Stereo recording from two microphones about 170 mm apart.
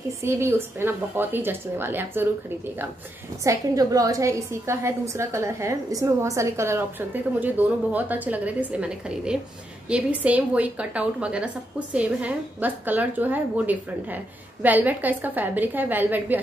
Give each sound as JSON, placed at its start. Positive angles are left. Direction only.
{"t": 0.2, "sound": "a woman's voice", "side_deg": -15}
{"t": 3.4, "sound": "a woman's voice", "side_deg": -20}